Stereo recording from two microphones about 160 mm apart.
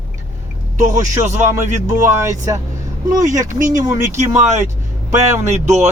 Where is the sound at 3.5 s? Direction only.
55° right (ahead or behind).